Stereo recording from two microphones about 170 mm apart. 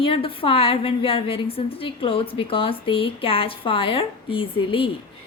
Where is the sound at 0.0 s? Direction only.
30° left (ahead or behind).